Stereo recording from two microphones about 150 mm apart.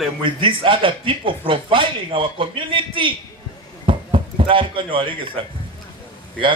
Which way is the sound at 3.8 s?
35° right (ahead or behind).